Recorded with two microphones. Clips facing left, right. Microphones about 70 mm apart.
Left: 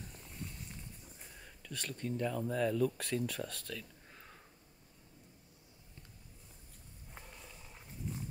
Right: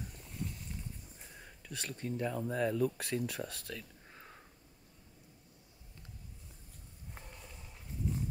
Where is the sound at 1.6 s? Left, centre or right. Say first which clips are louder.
Even; centre.